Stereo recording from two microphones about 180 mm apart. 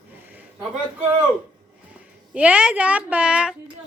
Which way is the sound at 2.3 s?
5° right (ahead or behind).